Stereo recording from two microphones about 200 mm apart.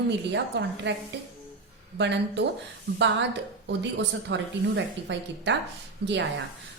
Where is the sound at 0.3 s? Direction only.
60° right (ahead or behind).